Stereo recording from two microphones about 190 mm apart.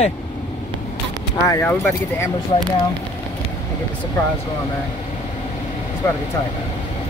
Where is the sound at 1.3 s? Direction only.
15° left (ahead or behind).